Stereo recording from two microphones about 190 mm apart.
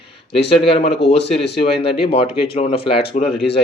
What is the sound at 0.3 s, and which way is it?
Speech, 30° left (ahead or behind).